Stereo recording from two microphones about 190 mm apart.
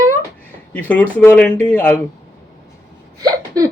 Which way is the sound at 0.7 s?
5° left (ahead or behind).